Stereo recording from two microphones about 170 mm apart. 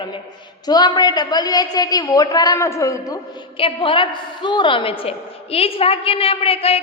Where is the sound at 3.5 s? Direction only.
30° left (ahead or behind).